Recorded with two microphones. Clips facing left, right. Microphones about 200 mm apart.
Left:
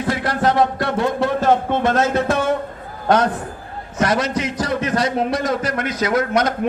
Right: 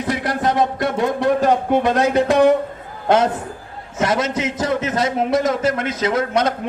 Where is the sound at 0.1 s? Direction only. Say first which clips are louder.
Left 1 dB; 20° right (ahead or behind).